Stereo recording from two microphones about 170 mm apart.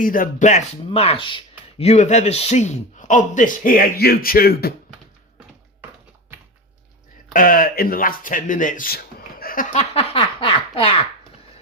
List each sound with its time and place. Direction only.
0.0 s a man's voice: 55° left (ahead or behind)
0.9 s laughter: 35° left (ahead or behind)
1.8 s a man's voice: 40° left (ahead or behind); by 4.7 s 65° left (ahead or behind)
7.3 s speech: 55° left (ahead or behind)
9.4 s laughter: 60° left (ahead or behind)
9.7 s laughter: 35° left (ahead or behind)